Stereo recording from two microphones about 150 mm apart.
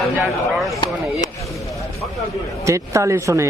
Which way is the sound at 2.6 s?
20° right (ahead or behind).